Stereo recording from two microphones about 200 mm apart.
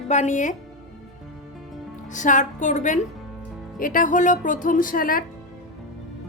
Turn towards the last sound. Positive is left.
turn(degrees=45)  # may be behind; listen again after turning